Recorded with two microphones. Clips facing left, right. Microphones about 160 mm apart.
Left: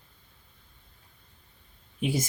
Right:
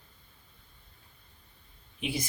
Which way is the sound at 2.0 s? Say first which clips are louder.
Left 5 dB; 45° left (ahead or behind).